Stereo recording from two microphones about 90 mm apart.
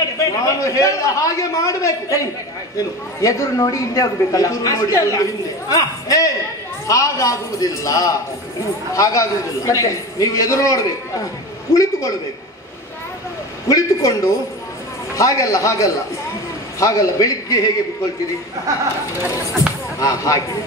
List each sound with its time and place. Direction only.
0.2 s a man's voice: 35° left (ahead or behind)
13.7 s a man's voice: 35° left (ahead or behind)
20.0 s a man's voice: 40° left (ahead or behind)